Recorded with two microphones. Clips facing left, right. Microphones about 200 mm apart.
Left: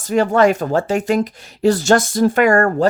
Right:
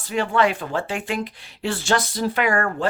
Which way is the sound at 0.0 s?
45° left (ahead or behind).